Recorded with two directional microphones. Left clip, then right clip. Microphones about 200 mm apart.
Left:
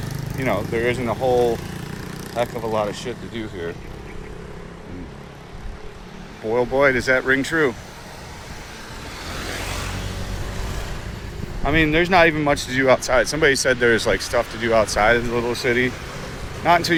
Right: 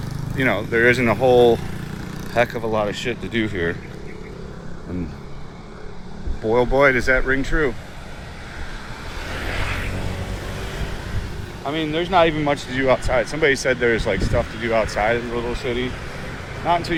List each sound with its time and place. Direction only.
0.3 s speech: 30° right (ahead or behind)
2.6 s speech: 15° right (ahead or behind)
3.3 s speech: 35° right (ahead or behind)
6.5 s speech: 10° right (ahead or behind); by 7.3 s 10° left (ahead or behind)
7.3 s speech: 20° left (ahead or behind)
9.3 s vehicle: 55° left (ahead or behind)
11.6 s speech: 30° left (ahead or behind)